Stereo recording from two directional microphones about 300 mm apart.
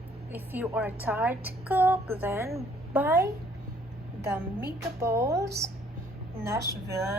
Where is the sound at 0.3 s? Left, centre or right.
Centre.